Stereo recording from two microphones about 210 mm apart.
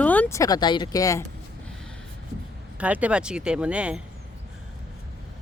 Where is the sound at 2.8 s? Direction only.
5° right (ahead or behind).